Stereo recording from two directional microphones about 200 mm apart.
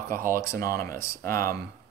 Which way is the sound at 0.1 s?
45° right (ahead or behind).